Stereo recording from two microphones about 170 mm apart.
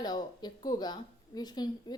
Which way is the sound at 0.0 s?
25° left (ahead or behind).